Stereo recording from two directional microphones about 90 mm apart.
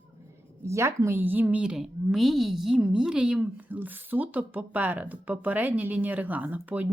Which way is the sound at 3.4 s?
20° right (ahead or behind).